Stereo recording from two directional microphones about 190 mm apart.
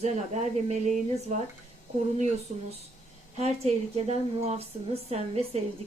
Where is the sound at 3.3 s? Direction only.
35° right (ahead or behind).